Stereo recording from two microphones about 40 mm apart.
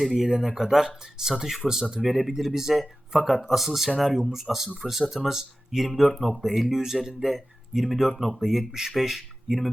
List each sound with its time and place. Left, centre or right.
0.1 s speech: centre
2.0 s speech: centre
5.1 s speech: centre
5.7 s speech: centre